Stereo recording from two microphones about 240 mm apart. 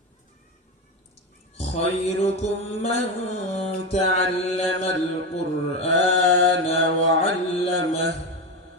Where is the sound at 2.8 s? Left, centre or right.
Left.